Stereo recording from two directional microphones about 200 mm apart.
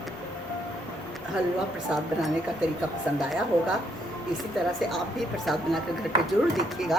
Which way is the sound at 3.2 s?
5° right (ahead or behind).